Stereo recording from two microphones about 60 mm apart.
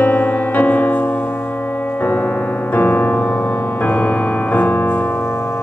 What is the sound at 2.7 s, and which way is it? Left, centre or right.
Music, left.